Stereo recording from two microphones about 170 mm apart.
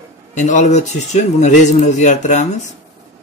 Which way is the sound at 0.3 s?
45° left (ahead or behind).